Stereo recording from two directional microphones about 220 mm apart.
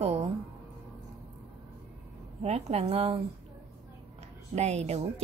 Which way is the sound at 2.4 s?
30° right (ahead or behind).